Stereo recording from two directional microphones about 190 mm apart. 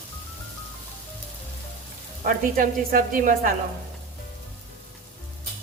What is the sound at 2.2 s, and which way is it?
A woman's voice, 45° right (ahead or behind).